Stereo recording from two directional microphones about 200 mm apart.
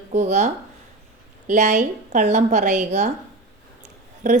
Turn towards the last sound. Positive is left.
turn(degrees=-40)  # may be behind; listen again after turning